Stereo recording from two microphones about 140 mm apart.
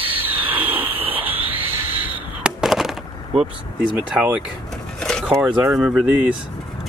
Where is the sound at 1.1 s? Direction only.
15° right (ahead or behind).